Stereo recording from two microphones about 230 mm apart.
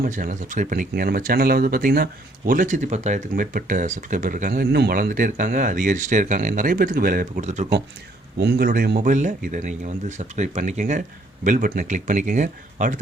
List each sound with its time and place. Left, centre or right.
0.0 s speech: right
8.4 s speech: right